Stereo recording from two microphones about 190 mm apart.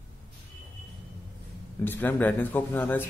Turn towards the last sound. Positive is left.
turn(degrees=10)  # may be behind; listen again after turning